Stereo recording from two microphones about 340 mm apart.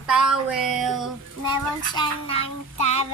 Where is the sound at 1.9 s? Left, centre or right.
Centre.